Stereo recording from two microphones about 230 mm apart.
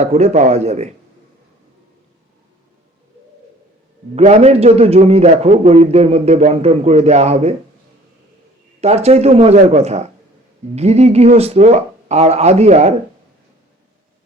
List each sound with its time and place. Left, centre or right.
0.0 s a man's voice: right
4.1 s a man's voice: right
8.8 s a man's voice: right